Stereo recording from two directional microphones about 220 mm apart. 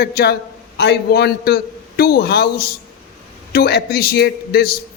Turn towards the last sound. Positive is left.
turn(degrees=45)  # may be behind; listen again after turning